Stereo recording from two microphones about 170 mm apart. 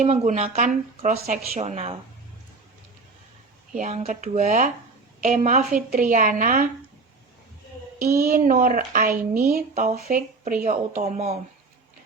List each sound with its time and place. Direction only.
0.0 s a woman's voice: 40° right (ahead or behind)
3.8 s speech: 40° right (ahead or behind)
8.2 s speech: 55° right (ahead or behind)